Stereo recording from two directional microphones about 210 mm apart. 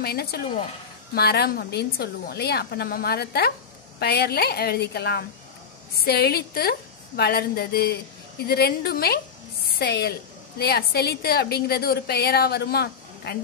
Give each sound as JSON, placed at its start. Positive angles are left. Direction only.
{"t": 0.0, "sound": "a woman's voice", "side_deg": 50}